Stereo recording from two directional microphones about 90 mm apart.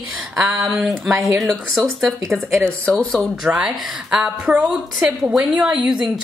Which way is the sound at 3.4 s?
5° right (ahead or behind).